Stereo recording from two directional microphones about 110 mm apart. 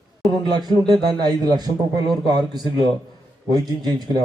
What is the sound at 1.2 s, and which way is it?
Speech, 40° right (ahead or behind).